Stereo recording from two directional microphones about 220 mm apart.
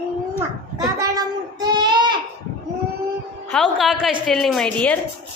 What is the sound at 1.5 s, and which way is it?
Child singing, 20° right (ahead or behind).